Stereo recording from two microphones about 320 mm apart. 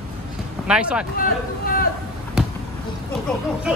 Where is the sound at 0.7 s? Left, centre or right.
Centre.